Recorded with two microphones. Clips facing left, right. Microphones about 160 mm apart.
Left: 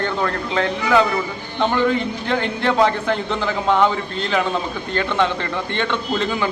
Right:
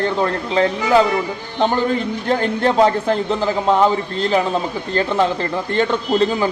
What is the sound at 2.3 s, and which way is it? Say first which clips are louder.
A man's voice: right 3 dB; 40° right (ahead or behind).